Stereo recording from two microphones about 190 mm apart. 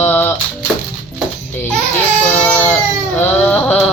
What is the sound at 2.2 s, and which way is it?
Baby cry, 10° left (ahead or behind).